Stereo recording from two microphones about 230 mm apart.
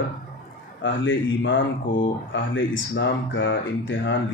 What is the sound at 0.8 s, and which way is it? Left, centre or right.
Speech, left.